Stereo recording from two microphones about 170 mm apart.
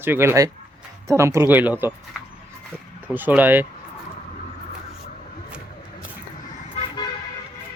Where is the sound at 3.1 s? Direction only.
10° right (ahead or behind).